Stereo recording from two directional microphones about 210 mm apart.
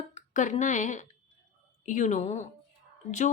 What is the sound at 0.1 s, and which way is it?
A woman's voice, 35° left (ahead or behind).